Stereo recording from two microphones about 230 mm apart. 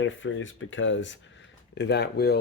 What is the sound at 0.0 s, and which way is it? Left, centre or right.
Speech, left.